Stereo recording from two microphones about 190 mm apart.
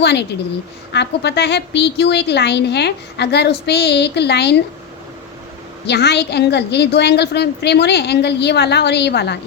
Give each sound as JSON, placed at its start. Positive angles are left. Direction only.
{"t": 0.0, "sound": "a woman's voice", "side_deg": 65}
{"t": 5.8, "sound": "a woman's voice", "side_deg": 60}